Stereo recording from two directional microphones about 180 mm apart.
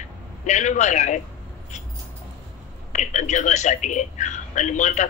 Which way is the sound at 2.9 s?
40° left (ahead or behind).